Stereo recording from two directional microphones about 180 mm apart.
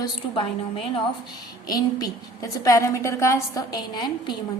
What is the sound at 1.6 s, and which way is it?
A woman's voice, 20° left (ahead or behind).